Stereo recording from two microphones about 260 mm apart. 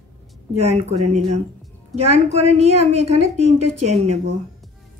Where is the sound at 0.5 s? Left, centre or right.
Right.